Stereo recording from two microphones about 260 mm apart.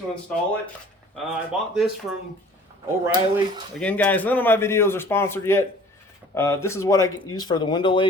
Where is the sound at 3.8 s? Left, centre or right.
Centre.